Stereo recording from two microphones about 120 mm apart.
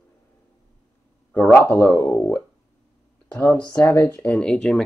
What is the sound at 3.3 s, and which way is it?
Speech, 15° left (ahead or behind).